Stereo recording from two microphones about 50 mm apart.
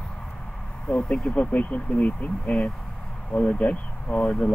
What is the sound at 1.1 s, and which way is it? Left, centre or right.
Speech, centre.